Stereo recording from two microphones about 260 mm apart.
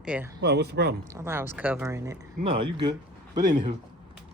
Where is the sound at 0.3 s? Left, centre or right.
Right.